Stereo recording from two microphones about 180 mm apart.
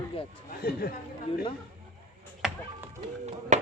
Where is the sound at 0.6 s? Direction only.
60° left (ahead or behind).